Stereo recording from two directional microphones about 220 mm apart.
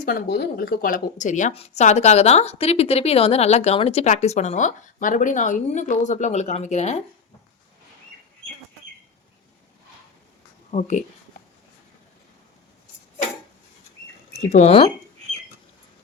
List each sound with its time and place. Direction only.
0.0 s a woman's voice: 40° left (ahead or behind)
10.7 s speech: 30° left (ahead or behind)
14.3 s speech: 30° left (ahead or behind)